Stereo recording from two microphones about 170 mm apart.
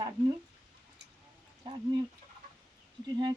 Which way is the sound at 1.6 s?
25° right (ahead or behind).